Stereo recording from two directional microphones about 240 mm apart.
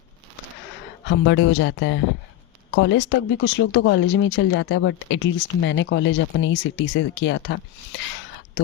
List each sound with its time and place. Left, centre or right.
1.0 s speech: left